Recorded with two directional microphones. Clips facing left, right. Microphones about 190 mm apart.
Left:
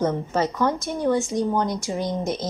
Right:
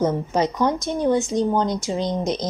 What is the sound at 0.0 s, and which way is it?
A woman's voice, 15° right (ahead or behind).